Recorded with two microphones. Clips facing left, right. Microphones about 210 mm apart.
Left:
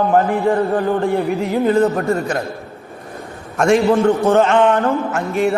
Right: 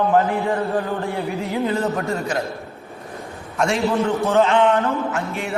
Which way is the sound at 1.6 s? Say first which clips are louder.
Left 9 dB; 55° left (ahead or behind).